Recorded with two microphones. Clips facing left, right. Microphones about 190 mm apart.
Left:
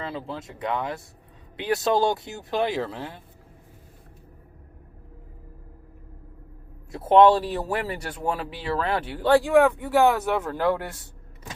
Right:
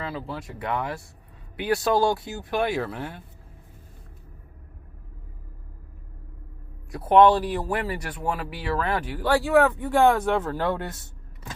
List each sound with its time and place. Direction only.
0.0 s speech: 25° left (ahead or behind)
6.9 s speech: 25° left (ahead or behind); by 10.5 s 10° left (ahead or behind)